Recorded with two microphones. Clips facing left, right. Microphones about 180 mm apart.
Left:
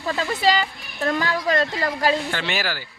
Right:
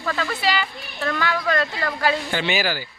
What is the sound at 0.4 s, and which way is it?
Speech, 40° left (ahead or behind).